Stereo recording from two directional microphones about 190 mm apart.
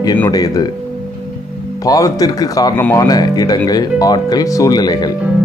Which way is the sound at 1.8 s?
20° left (ahead or behind).